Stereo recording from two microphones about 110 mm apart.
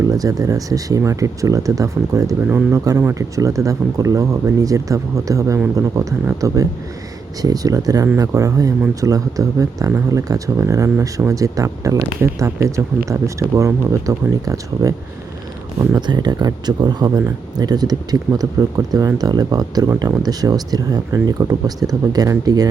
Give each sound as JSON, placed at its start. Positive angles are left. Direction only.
{"t": 0.1, "sound": "speech", "side_deg": -35}
{"t": 16.0, "sound": "speech", "side_deg": -40}